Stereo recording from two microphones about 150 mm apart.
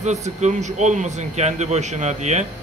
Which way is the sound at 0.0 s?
50° right (ahead or behind).